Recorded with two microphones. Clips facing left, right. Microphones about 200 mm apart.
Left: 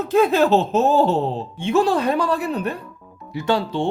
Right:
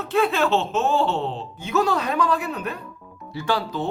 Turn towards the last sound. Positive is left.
turn(degrees=25)  # may be behind; listen again after turning